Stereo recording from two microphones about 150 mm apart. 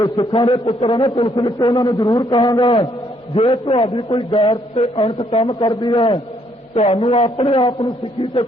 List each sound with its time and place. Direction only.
0.0 s a man's voice: 30° left (ahead or behind)
1.4 s a man's voice: 20° left (ahead or behind)
1.6 s a man's voice: 35° left (ahead or behind)
2.0 s a man's voice: 25° left (ahead or behind)
3.3 s a man's voice: 40° left (ahead or behind)
6.7 s a man's voice: 45° left (ahead or behind)